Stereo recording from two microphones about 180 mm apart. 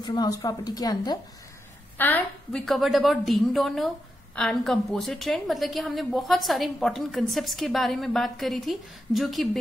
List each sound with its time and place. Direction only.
0.0 s a woman's voice: 20° left (ahead or behind)
2.0 s a woman's voice: 10° left (ahead or behind)